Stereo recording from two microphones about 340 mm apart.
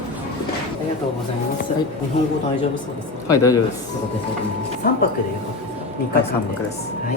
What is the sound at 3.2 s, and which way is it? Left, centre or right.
Speech, centre.